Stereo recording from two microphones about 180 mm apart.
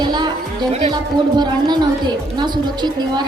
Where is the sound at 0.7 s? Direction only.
35° right (ahead or behind).